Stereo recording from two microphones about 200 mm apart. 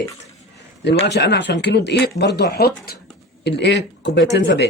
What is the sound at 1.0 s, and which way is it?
Speech, 60° left (ahead or behind).